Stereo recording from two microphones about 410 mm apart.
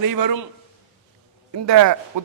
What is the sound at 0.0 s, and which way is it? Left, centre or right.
Speech, right.